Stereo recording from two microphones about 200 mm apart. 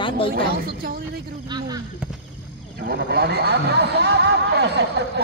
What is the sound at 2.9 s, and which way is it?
Speech, 50° right (ahead or behind).